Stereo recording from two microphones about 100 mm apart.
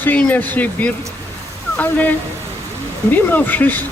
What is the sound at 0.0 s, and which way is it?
Speech, 15° left (ahead or behind).